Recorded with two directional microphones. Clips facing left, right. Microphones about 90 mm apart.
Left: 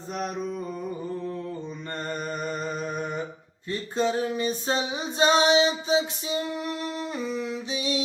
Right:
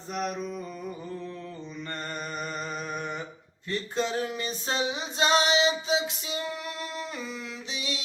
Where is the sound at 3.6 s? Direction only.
20° left (ahead or behind).